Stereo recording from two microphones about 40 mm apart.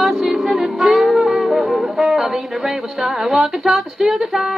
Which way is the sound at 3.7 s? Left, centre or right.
Centre.